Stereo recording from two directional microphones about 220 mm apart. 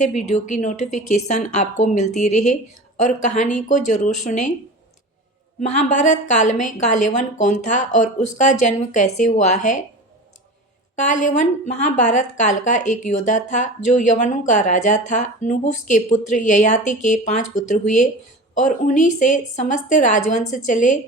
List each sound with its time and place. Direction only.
0.0 s a woman's voice: 35° left (ahead or behind)
5.5 s a woman's voice: 30° left (ahead or behind)
10.9 s a woman's voice: 35° left (ahead or behind)